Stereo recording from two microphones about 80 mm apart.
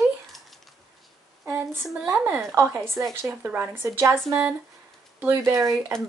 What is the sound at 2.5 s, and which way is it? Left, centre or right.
Speech, right.